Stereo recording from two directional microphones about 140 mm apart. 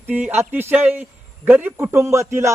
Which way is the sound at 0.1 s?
15° right (ahead or behind).